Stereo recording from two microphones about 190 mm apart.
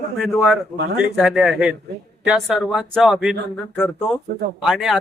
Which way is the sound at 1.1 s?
Centre (ahead or behind).